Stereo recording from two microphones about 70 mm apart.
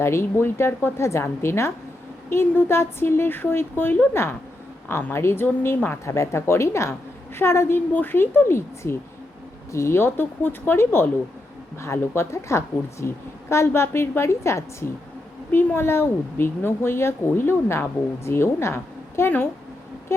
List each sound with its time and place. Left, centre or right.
0.0 s speech: left